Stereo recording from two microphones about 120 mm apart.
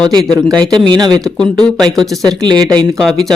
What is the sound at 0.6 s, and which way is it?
Speech, 40° right (ahead or behind).